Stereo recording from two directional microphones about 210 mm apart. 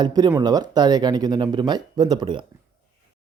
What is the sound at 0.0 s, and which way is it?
Speech, 20° right (ahead or behind).